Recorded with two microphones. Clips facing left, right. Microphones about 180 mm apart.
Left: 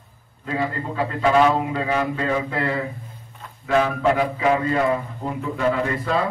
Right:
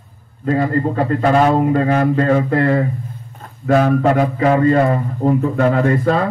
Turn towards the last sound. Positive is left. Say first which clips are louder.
# right 7 dB
turn(degrees=-50)  # may be behind; listen again after turning